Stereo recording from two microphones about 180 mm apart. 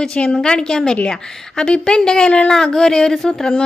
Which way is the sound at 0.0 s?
5° left (ahead or behind).